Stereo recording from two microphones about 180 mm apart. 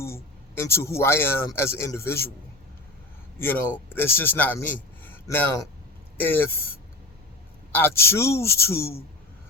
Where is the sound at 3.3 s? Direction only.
10° left (ahead or behind).